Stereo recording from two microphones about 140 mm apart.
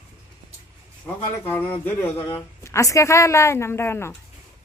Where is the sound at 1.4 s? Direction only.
15° left (ahead or behind).